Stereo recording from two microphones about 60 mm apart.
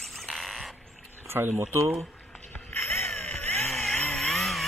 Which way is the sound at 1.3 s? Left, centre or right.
Right.